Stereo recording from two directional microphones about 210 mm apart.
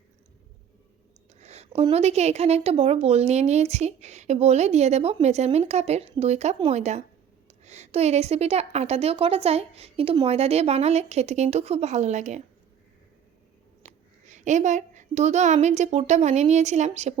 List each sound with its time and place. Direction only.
1.4 s a woman's voice: 30° right (ahead or behind)
13.8 s a woman's voice: 35° right (ahead or behind)